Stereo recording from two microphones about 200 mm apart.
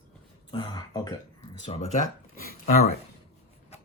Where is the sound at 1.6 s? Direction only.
35° left (ahead or behind).